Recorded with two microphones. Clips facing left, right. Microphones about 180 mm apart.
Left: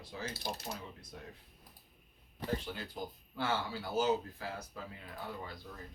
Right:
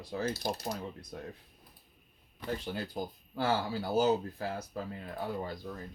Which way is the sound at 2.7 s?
40° right (ahead or behind).